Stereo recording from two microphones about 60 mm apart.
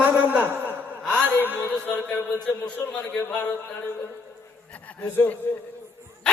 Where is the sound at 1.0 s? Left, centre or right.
Centre.